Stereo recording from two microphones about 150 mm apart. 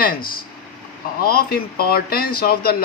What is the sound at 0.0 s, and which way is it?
Speech, 75° left (ahead or behind).